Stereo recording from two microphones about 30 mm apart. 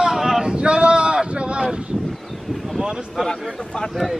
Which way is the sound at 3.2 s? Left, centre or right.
Centre.